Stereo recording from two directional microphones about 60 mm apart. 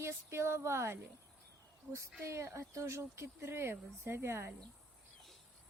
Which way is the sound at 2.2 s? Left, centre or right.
Right.